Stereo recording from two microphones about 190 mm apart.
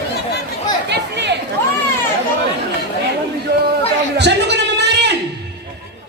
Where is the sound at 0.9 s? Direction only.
65° right (ahead or behind).